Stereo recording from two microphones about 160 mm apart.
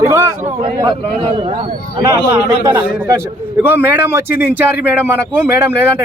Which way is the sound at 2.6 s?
20° right (ahead or behind).